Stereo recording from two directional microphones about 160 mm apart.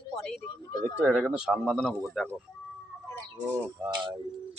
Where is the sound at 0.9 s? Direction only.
10° right (ahead or behind).